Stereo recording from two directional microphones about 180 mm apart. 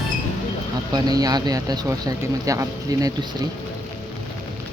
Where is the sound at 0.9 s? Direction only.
20° right (ahead or behind).